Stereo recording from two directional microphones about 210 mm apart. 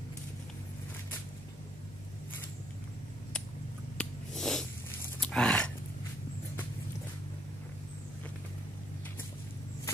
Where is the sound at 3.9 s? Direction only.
Centre (ahead or behind).